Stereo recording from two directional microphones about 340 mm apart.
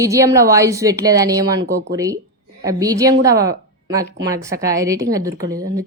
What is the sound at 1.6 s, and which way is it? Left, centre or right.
Speech, right.